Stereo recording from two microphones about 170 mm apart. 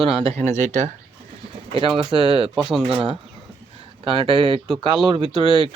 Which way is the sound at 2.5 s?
Centre (ahead or behind).